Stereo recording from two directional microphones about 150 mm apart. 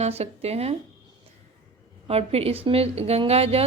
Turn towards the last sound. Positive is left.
turn(degrees=-40)  # may be behind; listen again after turning